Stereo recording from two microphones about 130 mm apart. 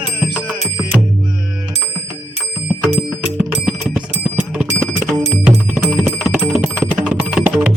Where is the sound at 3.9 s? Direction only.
5° right (ahead or behind).